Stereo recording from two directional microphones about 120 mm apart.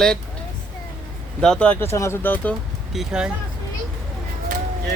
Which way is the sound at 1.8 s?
20° left (ahead or behind).